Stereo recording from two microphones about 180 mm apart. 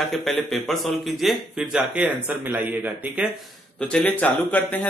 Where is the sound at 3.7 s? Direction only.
5° left (ahead or behind).